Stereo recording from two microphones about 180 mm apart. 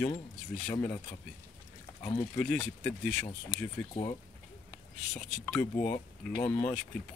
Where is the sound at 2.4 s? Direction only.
5° left (ahead or behind).